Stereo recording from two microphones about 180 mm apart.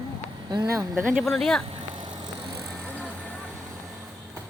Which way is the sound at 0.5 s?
20° right (ahead or behind).